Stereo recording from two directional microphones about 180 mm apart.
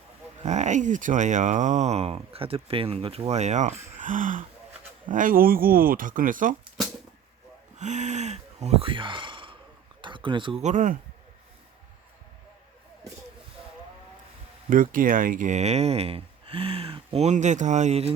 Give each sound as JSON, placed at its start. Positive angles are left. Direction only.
{"t": 0.4, "sound": "speech", "side_deg": -40}
{"t": 7.8, "sound": "gasp", "side_deg": -40}
{"t": 10.0, "sound": "a sound", "side_deg": -25}
{"t": 10.6, "sound": "speech", "side_deg": -45}
{"t": 14.7, "sound": "speech", "side_deg": -50}